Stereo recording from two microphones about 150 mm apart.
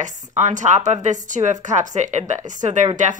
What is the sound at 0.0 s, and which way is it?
Speech, 55° right (ahead or behind).